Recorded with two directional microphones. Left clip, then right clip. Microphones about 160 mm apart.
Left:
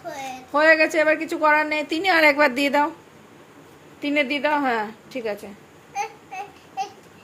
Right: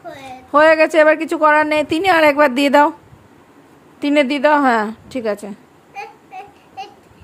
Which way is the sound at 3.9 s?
80° right.